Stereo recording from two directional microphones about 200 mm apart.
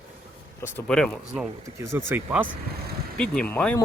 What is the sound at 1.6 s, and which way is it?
Speech, 15° right (ahead or behind).